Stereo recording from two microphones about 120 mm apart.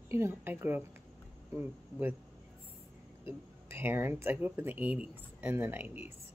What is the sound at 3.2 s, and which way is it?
Speech, 20° right (ahead or behind).